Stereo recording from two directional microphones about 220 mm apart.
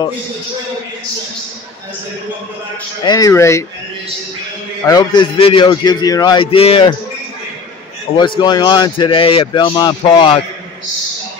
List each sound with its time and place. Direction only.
3.0 s speech: 20° left (ahead or behind)
4.8 s a man's voice: 20° left (ahead or behind)
8.2 s a man's voice: 20° left (ahead or behind)